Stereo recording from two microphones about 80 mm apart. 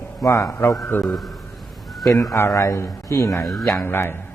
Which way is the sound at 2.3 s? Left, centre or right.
Left.